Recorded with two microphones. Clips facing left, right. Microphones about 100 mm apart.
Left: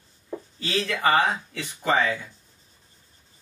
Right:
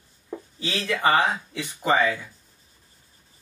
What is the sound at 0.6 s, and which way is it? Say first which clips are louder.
Speech: even; 20° right (ahead or behind).